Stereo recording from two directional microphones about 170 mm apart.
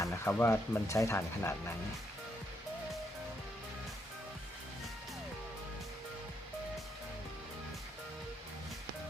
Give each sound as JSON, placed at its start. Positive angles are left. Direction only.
{"t": 0.0, "sound": "speech", "side_deg": 15}